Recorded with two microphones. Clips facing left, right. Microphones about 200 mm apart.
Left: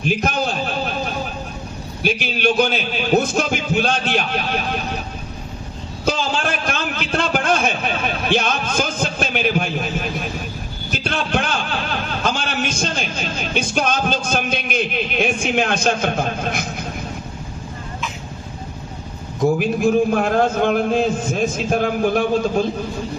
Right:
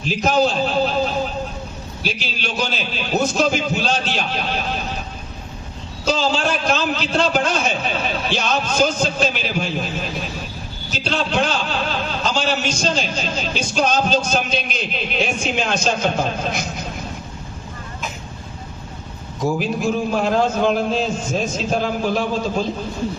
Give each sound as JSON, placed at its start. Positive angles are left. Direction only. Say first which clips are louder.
{"t": 0.0, "sound": "a sound", "louder": "right 3 dB", "side_deg": 55}
{"t": 2.0, "sound": "a man's voice", "louder": "left 6 dB", "side_deg": 55}
{"t": 6.1, "sound": "a man's voice", "louder": "right 2 dB", "side_deg": 55}
{"t": 10.9, "sound": "a man's voice", "louder": "right 1 dB", "side_deg": 55}
{"t": 19.5, "sound": "a man's voice", "louder": "left 5 dB", "side_deg": 55}